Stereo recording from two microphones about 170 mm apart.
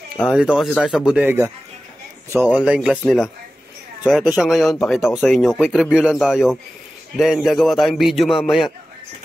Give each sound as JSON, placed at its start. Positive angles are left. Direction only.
{"t": 0.3, "sound": "speech", "side_deg": -5}
{"t": 0.7, "sound": "speech", "side_deg": 5}
{"t": 1.0, "sound": "a man's voice", "side_deg": -10}
{"t": 4.0, "sound": "speech", "side_deg": -10}